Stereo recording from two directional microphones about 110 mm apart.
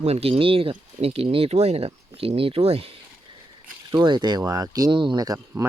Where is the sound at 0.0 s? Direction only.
70° right (ahead or behind).